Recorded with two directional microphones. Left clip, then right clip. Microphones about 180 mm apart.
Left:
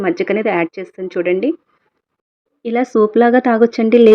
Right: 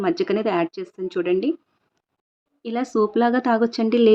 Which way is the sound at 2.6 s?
15° left (ahead or behind).